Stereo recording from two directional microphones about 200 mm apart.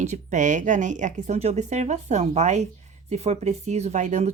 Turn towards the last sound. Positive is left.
turn(degrees=-35)  # may be behind; listen again after turning